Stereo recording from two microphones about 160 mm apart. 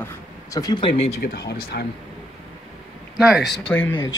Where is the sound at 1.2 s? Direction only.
80° left.